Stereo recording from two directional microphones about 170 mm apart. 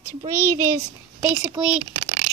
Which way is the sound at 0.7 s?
10° right (ahead or behind).